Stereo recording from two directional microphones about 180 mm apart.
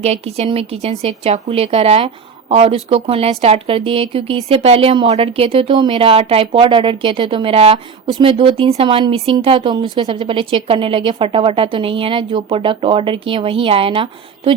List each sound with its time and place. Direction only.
0.0 s a woman's voice: 35° right (ahead or behind)